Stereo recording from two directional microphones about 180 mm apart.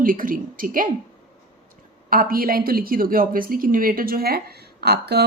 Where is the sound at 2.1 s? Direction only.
55° right (ahead or behind).